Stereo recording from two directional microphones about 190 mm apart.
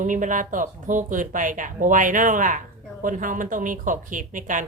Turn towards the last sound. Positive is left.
turn(degrees=-45)  # may be behind; listen again after turning